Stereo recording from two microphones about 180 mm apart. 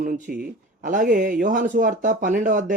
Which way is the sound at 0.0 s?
50° right (ahead or behind).